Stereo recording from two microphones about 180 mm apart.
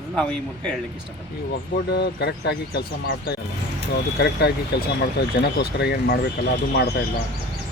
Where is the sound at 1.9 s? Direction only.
65° left (ahead or behind).